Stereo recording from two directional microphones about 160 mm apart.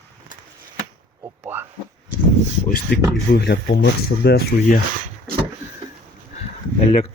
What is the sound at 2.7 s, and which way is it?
Speech, 85° left.